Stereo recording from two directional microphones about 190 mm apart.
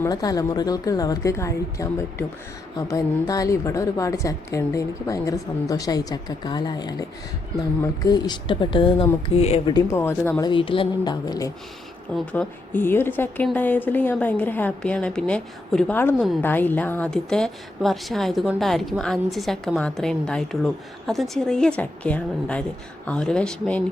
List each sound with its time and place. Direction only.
0.0 s a woman's voice: 20° left (ahead or behind)
9.7 s a woman's voice: 15° left (ahead or behind)
10.5 s a woman's voice: 25° left (ahead or behind)
12.1 s a woman's voice: 5° left (ahead or behind)